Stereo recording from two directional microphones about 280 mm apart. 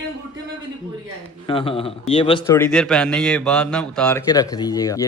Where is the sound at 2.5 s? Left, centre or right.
Centre.